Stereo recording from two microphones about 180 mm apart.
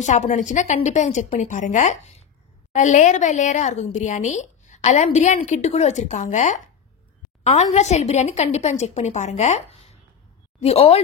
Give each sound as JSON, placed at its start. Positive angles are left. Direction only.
{"t": 0.0, "sound": "a woman's voice", "side_deg": 40}